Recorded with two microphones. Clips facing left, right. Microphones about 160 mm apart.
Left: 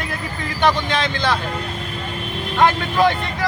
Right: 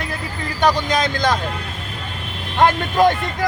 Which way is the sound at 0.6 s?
40° right (ahead or behind).